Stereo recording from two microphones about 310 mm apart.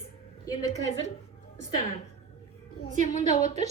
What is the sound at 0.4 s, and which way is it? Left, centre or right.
Speech, centre.